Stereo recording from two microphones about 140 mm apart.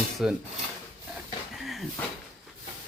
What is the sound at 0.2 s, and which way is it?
Dishes, 5° right (ahead or behind).